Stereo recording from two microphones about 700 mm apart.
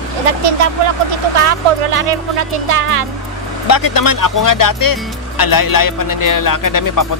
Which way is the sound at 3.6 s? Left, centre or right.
Left.